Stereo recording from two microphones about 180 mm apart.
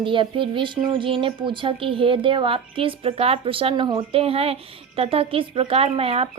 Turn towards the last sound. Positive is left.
turn(degrees=-30)  # may be behind; listen again after turning